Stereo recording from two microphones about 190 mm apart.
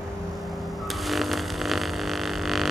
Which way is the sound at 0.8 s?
Centre (ahead or behind).